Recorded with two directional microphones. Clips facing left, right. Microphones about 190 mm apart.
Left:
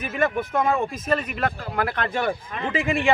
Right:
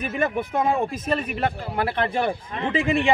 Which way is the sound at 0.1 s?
35° right (ahead or behind).